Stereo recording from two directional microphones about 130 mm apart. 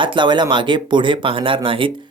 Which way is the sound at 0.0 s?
40° right (ahead or behind).